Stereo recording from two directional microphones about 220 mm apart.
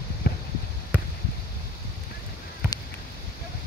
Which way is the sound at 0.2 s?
45° left (ahead or behind).